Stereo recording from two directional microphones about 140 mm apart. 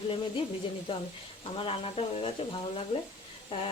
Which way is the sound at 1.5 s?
40° left (ahead or behind).